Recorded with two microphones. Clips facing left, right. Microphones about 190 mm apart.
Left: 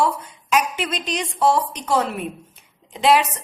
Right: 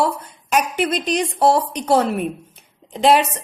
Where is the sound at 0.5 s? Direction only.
55° right (ahead or behind).